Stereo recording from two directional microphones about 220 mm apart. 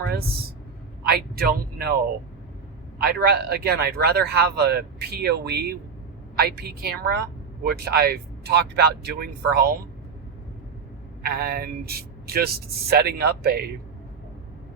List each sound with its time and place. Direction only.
1.1 s speech: 45° right (ahead or behind)
3.0 s speech: 45° right (ahead or behind)
11.2 s a man's voice: 45° right (ahead or behind)